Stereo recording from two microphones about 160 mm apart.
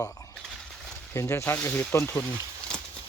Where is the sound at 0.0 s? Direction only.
20° left (ahead or behind).